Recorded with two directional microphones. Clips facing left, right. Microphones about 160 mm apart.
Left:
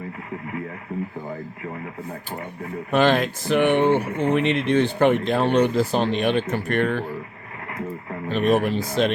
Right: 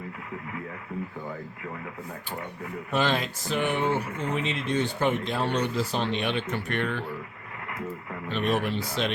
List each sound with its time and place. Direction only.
2.9 s speech: 55° left (ahead or behind)
8.3 s speech: 45° left (ahead or behind)